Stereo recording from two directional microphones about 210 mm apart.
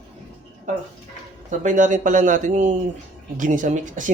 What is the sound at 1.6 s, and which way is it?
Speech, 35° right (ahead or behind).